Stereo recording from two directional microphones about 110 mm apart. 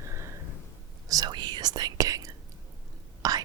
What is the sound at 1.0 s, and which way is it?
Whispering, 35° right (ahead or behind).